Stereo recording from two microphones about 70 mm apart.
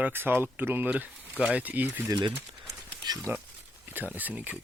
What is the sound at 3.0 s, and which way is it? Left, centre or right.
Speech, right.